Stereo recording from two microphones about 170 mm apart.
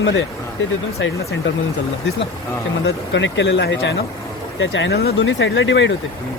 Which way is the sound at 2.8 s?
90° left.